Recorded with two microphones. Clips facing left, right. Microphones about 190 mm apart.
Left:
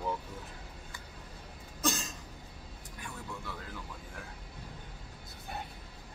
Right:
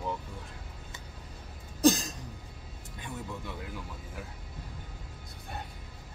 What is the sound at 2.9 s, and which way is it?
Music, 20° right (ahead or behind).